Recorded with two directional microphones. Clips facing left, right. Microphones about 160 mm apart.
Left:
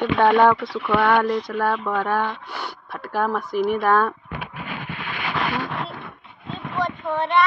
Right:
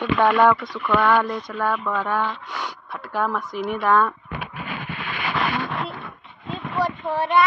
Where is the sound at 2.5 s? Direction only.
30° left (ahead or behind).